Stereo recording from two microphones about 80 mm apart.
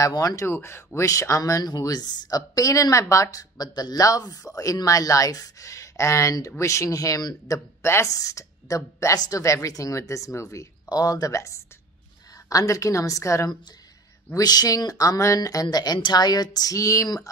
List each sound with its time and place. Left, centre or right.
0.0 s speech: left
0.4 s speech: left
1.6 s speech: left
14.3 s speech: left